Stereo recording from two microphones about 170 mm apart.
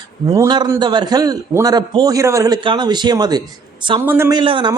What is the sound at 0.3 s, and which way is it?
A man's voice, 25° right (ahead or behind).